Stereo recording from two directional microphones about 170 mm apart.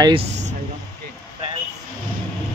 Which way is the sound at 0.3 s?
45° right (ahead or behind).